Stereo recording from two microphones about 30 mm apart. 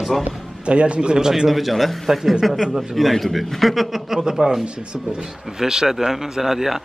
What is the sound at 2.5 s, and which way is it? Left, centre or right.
Speech, centre.